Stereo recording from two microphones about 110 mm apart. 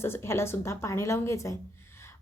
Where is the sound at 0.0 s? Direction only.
20° left (ahead or behind).